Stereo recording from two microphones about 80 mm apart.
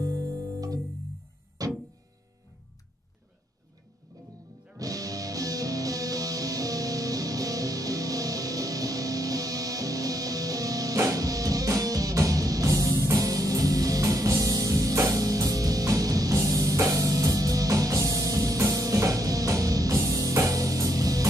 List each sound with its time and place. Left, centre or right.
0.0 s music: right
4.7 s music: right